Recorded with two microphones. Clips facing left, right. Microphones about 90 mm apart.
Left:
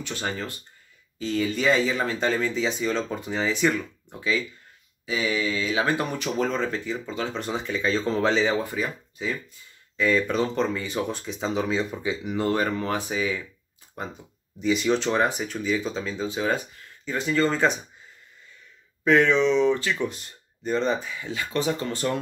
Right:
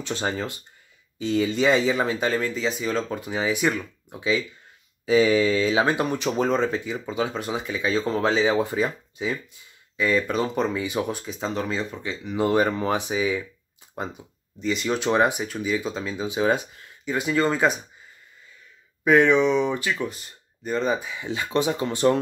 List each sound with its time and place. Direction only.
0.0 s speech: 25° right (ahead or behind)
2.2 s speech: centre (ahead or behind)
5.0 s mantra: 35° right (ahead or behind)
5.8 s speech: 20° right (ahead or behind)
8.5 s speech: 25° right (ahead or behind)
9.9 s speech: 5° right (ahead or behind)
12.4 s speech: 15° right (ahead or behind)
14.6 s speech: centre (ahead or behind)
15.0 s speech: 15° right (ahead or behind)
19.0 s speech: 15° right (ahead or behind)
21.0 s speech: 20° right (ahead or behind)